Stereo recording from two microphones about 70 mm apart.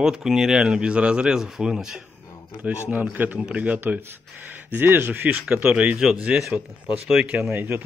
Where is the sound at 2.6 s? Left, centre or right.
Right.